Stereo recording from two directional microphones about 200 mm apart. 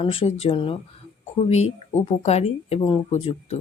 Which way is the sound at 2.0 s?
30° left (ahead or behind).